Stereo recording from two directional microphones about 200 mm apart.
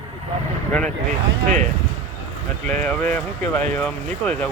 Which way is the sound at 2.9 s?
5° left (ahead or behind).